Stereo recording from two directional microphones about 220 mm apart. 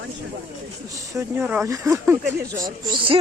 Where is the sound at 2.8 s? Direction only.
20° right (ahead or behind).